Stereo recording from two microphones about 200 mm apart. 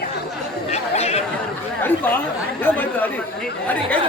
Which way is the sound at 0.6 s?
30° left (ahead or behind).